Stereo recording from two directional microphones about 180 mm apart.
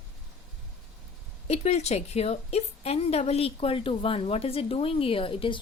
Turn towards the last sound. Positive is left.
turn(degrees=30)  # may be behind; listen again after turning